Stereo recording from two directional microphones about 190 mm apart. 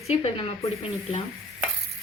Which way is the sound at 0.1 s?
30° left (ahead or behind).